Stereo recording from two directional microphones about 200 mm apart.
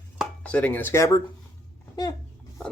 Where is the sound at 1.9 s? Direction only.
20° left (ahead or behind).